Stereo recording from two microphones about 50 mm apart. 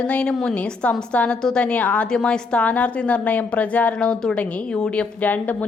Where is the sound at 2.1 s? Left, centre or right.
Centre.